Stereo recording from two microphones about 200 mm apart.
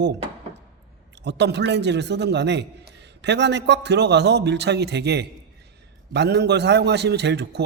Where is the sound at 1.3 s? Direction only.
60° right (ahead or behind).